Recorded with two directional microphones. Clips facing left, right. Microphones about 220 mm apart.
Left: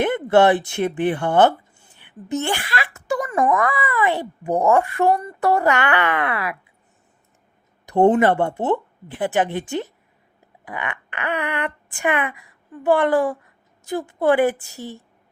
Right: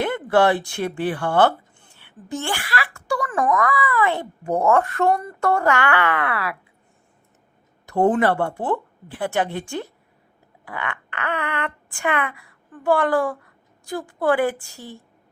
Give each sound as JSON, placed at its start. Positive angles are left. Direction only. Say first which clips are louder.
{"t": 0.0, "sound": "a woman's voice", "louder": "left 3 dB", "side_deg": 20}
{"t": 7.9, "sound": "speech", "louder": "left 3 dB", "side_deg": 25}